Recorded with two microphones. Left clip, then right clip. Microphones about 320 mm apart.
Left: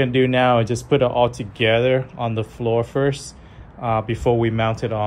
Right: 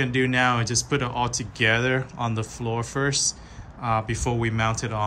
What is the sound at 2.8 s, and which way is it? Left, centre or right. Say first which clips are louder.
Speech: left 3 dB; centre.